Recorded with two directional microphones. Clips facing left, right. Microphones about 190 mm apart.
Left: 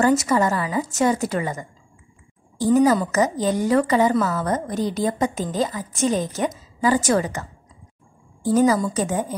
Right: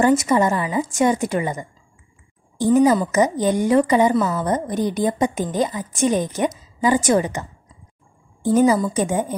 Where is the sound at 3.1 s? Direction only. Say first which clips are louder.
Right 2 dB; 15° right (ahead or behind).